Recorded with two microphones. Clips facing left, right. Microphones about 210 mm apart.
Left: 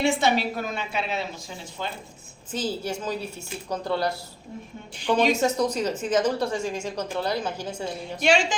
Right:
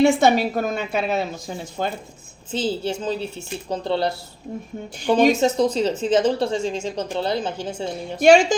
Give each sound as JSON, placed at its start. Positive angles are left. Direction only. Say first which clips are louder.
{"t": 0.0, "sound": "a woman's voice", "louder": "right 7 dB", "side_deg": -45}
{"t": 2.5, "sound": "a woman's voice", "louder": "right 5 dB", "side_deg": -25}
{"t": 4.9, "sound": "a woman's voice", "louder": "right 5 dB", "side_deg": -45}
{"t": 5.5, "sound": "a woman's voice", "louder": "right 5 dB", "side_deg": -25}
{"t": 8.2, "sound": "a woman's voice", "louder": "right 9 dB", "side_deg": -45}